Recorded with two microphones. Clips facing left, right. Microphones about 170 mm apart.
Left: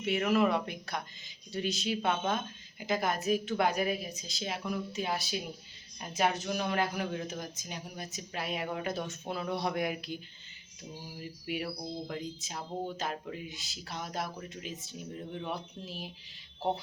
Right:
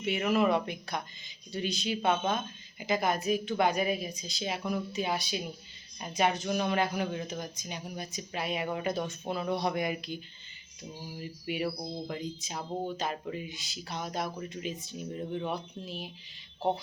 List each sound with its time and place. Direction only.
0.0 s speech: centre (ahead or behind)
11.2 s speech: centre (ahead or behind)